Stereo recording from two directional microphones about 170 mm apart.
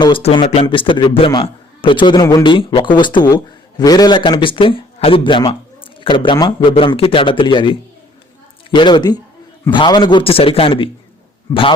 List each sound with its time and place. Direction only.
0.0 s a man's voice: 35° left (ahead or behind)
11.5 s a man's voice: 20° left (ahead or behind)